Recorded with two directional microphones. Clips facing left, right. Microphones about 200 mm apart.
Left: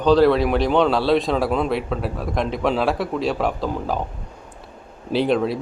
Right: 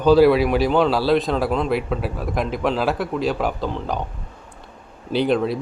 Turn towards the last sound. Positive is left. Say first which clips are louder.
# even
turn(degrees=0)  # may be behind; listen again after turning